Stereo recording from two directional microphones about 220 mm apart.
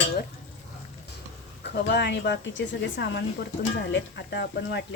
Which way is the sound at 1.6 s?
50° left (ahead or behind).